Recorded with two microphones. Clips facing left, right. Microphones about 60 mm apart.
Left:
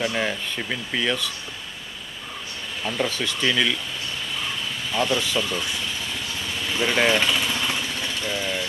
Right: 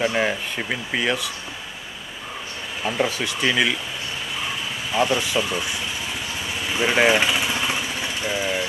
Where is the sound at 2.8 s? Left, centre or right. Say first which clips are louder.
Right 3 dB; centre.